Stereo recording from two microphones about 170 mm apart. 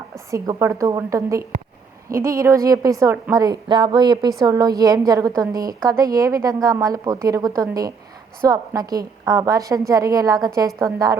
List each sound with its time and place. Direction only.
0.3 s a woman's voice: 20° right (ahead or behind)